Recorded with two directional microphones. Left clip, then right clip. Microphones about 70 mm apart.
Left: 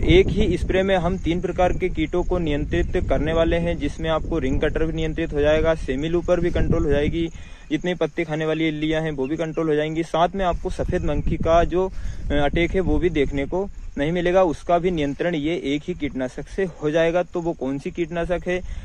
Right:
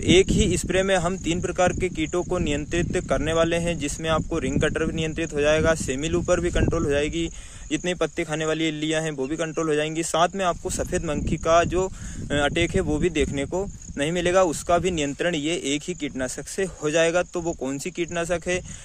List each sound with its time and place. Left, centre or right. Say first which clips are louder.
0.0 s speech: left 1 dB; right